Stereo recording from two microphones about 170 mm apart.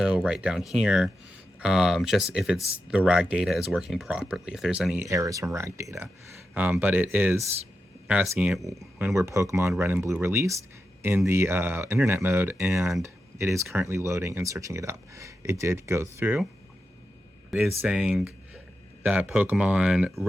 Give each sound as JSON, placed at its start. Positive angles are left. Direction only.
{"t": 0.0, "sound": "speech", "side_deg": -5}
{"t": 5.0, "sound": "speech", "side_deg": -20}
{"t": 17.5, "sound": "speech", "side_deg": -5}